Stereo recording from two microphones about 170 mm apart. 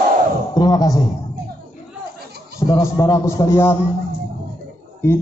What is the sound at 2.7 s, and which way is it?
A man's voice, 20° left (ahead or behind).